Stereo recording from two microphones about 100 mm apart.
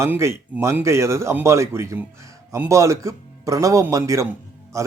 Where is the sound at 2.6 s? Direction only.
30° right (ahead or behind).